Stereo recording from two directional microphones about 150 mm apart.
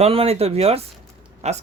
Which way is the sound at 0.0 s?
40° right (ahead or behind).